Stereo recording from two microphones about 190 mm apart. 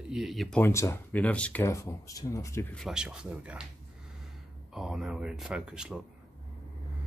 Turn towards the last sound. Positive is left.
turn(degrees=-5)  # may be behind; listen again after turning